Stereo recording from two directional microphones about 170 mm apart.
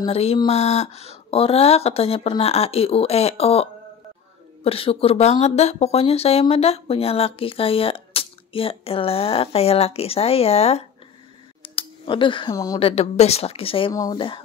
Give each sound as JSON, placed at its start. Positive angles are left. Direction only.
{"t": 0.0, "sound": "speech", "side_deg": 35}
{"t": 4.6, "sound": "speech", "side_deg": 35}
{"t": 11.6, "sound": "a sound", "side_deg": 30}
{"t": 12.7, "sound": "speech", "side_deg": 35}